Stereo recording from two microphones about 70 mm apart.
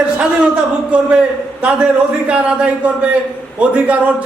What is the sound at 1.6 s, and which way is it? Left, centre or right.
A man's voice, centre.